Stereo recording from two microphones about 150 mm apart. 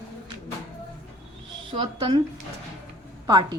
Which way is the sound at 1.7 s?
30° right (ahead or behind).